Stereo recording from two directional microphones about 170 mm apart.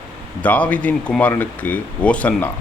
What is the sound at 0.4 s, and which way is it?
Speech, 10° left (ahead or behind).